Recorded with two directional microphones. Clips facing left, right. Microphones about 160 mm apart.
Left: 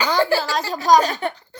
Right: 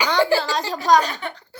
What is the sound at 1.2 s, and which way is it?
Speech, 45° left (ahead or behind).